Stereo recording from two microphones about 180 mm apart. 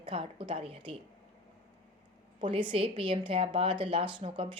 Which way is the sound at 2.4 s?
30° right (ahead or behind).